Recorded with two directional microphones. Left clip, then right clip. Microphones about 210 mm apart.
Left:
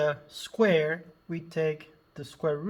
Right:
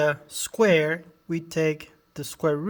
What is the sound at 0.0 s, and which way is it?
Speech, 30° right (ahead or behind).